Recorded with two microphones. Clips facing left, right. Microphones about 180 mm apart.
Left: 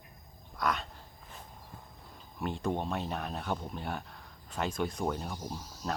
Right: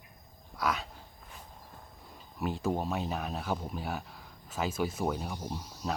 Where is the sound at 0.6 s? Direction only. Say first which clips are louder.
Even; centre (ahead or behind).